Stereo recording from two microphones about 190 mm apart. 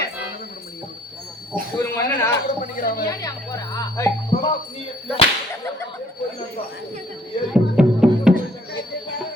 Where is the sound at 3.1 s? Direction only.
20° left (ahead or behind).